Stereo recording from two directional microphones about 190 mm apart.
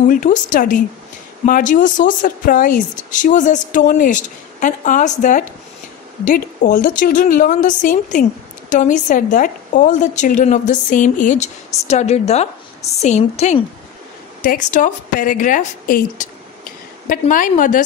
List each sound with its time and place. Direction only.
0.0 s a woman's voice: 45° left (ahead or behind)